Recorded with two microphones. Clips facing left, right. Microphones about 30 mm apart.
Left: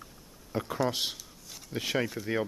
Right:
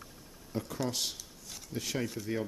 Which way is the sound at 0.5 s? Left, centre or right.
Left.